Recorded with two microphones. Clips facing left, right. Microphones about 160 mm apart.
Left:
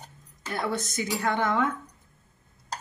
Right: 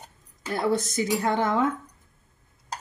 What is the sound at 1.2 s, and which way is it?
Speech, 25° right (ahead or behind).